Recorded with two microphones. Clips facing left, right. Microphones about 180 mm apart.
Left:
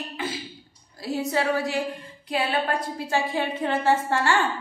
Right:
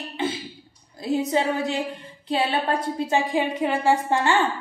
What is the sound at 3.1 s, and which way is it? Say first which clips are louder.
A woman's voice: right 2 dB; 15° right (ahead or behind).